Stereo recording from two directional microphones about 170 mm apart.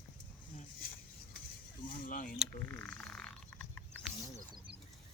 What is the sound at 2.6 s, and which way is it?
Frog, 10° left (ahead or behind).